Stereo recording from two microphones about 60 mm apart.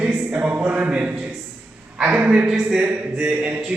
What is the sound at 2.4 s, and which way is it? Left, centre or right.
Speech, centre.